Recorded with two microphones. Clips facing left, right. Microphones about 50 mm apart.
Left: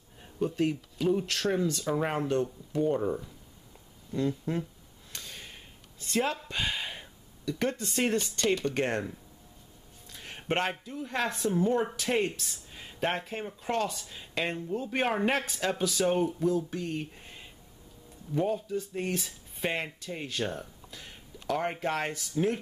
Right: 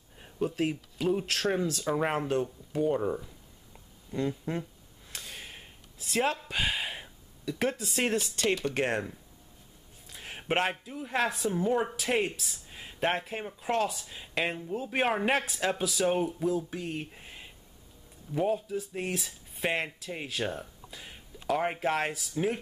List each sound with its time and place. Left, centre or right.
0.2 s speech: centre
5.1 s a sound: centre
6.1 s speech: centre